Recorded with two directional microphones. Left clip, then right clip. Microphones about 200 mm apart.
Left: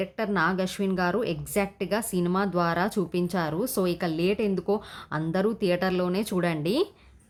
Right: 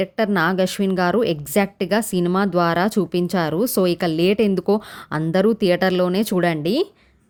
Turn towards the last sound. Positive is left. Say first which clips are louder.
# right 7 dB
turn(degrees=-30)  # may be behind; listen again after turning